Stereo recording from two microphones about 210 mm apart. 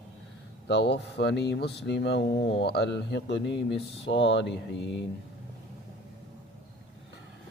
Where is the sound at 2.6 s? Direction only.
55° left (ahead or behind).